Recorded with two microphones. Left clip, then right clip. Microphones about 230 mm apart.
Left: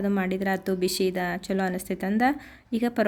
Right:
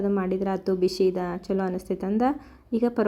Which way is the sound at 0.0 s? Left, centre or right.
Left.